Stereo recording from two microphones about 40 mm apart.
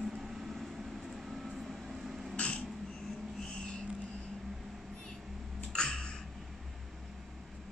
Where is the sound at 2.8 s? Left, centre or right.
Centre.